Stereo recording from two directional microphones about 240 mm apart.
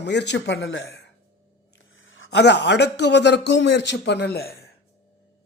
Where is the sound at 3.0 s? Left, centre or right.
Left.